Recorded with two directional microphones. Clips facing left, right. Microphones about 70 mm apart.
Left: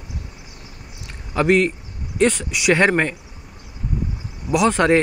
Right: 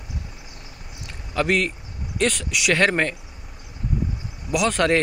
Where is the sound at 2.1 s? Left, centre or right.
Left.